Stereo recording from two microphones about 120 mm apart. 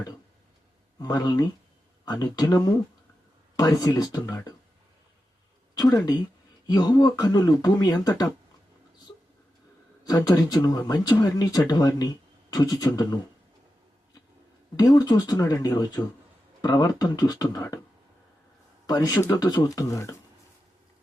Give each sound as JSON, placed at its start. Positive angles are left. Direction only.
{"t": 0.9, "sound": "speech", "side_deg": 35}
{"t": 3.6, "sound": "speech", "side_deg": 30}
{"t": 5.8, "sound": "speech", "side_deg": 30}
{"t": 10.1, "sound": "speech", "side_deg": 35}
{"t": 14.8, "sound": "speech", "side_deg": 35}
{"t": 18.9, "sound": "speech", "side_deg": 30}
{"t": 19.4, "sound": "speech", "side_deg": 35}